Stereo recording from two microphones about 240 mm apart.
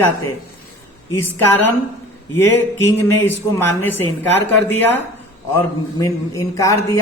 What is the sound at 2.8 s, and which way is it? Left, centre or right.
Speech, centre.